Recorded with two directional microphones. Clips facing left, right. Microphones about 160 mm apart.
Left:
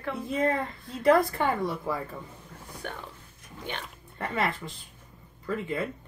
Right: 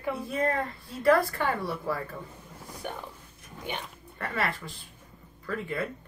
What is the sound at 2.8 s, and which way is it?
Speech, 10° right (ahead or behind).